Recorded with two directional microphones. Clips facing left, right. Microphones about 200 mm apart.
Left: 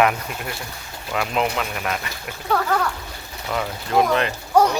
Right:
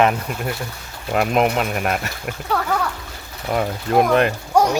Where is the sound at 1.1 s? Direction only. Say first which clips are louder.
Right 5 dB; 50° right (ahead or behind).